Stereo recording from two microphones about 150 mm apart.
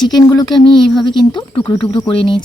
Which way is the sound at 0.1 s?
25° left (ahead or behind).